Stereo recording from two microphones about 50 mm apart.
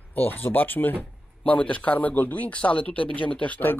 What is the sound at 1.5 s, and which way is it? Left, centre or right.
Speech, left.